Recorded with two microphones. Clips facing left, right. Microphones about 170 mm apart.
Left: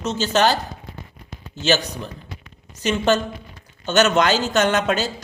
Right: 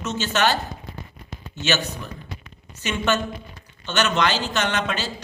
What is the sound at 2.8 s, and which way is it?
A man's voice, 35° left (ahead or behind).